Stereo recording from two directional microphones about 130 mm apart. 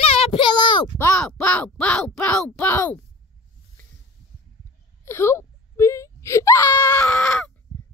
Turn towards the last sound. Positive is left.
turn(degrees=5)  # may be behind; listen again after turning